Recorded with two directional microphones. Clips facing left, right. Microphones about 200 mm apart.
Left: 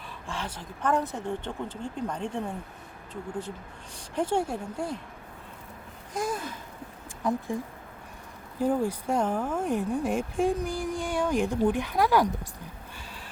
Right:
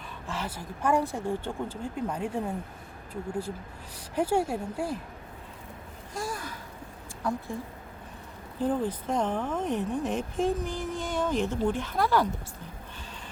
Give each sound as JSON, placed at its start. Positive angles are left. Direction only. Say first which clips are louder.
{"t": 0.3, "sound": "speech", "louder": "right 1 dB", "side_deg": -5}
{"t": 4.1, "sound": "speech", "louder": "right 1 dB", "side_deg": -5}
{"t": 6.1, "sound": "a sound", "louder": "left 4 dB", "side_deg": 20}
{"t": 7.2, "sound": "speech", "louder": "left 3 dB", "side_deg": 20}
{"t": 8.5, "sound": "speech", "louder": "left 2 dB", "side_deg": 10}